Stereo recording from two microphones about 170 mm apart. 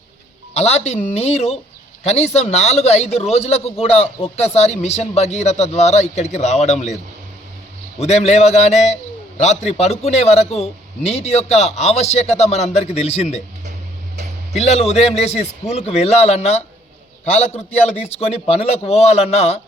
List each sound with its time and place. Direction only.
0.5 s a man's voice: 40° left (ahead or behind)
14.5 s a man's voice: 40° left (ahead or behind)